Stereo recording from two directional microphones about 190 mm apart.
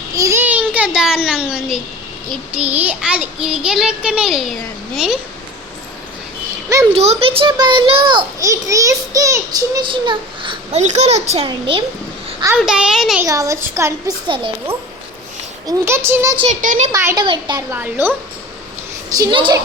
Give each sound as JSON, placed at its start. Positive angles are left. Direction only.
{"t": 0.2, "sound": "a sound", "side_deg": -15}
{"t": 2.5, "sound": "a child's voice", "side_deg": -5}
{"t": 6.9, "sound": "a child's voice", "side_deg": -35}
{"t": 12.5, "sound": "a child's voice", "side_deg": -5}
{"t": 13.2, "sound": "a woman's voice", "side_deg": -15}
{"t": 14.3, "sound": "a child's voice", "side_deg": -25}
{"t": 15.8, "sound": "a woman's voice", "side_deg": -10}
{"t": 16.5, "sound": "a child's voice", "side_deg": -40}
{"t": 16.9, "sound": "a woman's voice", "side_deg": -15}
{"t": 17.7, "sound": "a woman's voice", "side_deg": -10}
{"t": 19.1, "sound": "a child's voice", "side_deg": -25}